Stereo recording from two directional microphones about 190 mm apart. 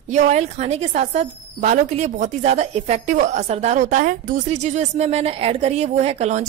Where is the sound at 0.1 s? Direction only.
35° right (ahead or behind).